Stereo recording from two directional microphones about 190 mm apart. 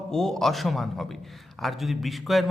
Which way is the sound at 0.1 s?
Centre (ahead or behind).